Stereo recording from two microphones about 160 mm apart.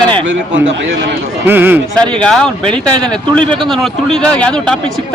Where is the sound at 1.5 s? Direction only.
10° right (ahead or behind).